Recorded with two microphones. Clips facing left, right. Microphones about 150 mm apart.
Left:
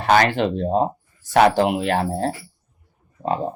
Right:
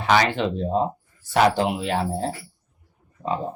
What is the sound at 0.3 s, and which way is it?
Speech, 60° left (ahead or behind).